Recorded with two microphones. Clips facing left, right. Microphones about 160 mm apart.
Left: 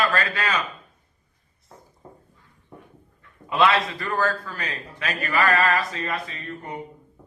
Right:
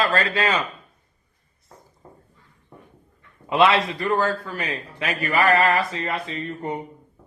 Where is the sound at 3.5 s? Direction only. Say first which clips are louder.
Right 2 dB; 20° right (ahead or behind).